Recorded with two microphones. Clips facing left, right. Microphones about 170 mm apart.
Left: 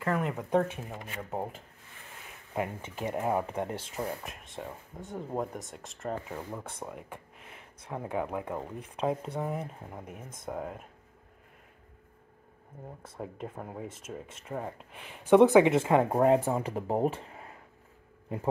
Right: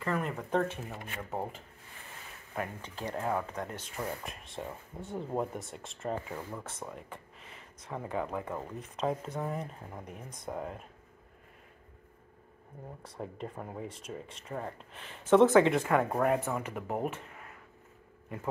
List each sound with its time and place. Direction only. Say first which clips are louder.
0.0 s speech: left 3 dB; 5° left (ahead or behind)
2.5 s speech: left 4 dB; 20° left (ahead or behind)
4.2 s speech: even; centre (ahead or behind)
6.3 s speech: left 1 dB; 10° left (ahead or behind)
13.2 s speech: left 1 dB; 5° left (ahead or behind); by 17.6 s 30° left (ahead or behind)